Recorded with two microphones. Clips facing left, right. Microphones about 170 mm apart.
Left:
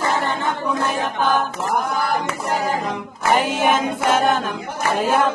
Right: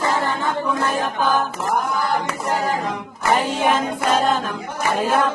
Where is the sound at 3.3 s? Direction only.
5° left (ahead or behind).